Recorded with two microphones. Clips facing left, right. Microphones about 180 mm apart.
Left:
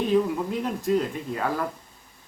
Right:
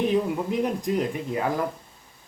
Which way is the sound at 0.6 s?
15° right (ahead or behind).